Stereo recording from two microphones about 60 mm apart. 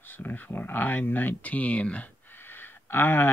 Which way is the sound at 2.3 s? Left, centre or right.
Left.